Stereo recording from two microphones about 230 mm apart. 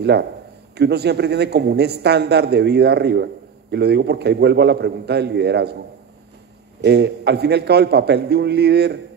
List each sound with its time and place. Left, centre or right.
0.7 s a man's voice: right
6.8 s a man's voice: right